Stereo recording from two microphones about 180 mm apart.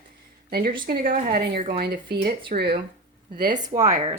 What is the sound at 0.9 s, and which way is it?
Speech, 50° right (ahead or behind).